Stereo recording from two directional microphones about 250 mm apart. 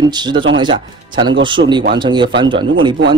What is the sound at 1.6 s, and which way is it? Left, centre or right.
Speech, right.